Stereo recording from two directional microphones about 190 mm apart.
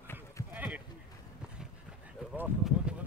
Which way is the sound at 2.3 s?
5° right (ahead or behind).